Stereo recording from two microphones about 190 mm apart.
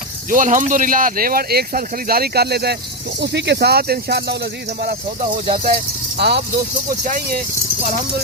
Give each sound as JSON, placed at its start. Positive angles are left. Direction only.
{"t": 0.3, "sound": "speech", "side_deg": -45}